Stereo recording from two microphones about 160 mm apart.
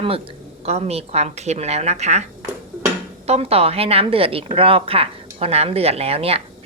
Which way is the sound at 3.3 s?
40° right (ahead or behind).